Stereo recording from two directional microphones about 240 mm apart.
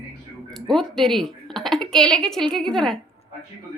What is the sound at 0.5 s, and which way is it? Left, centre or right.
Speech, centre.